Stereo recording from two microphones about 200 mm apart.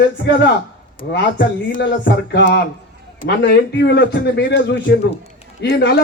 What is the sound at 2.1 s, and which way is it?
A man's voice, 60° left (ahead or behind).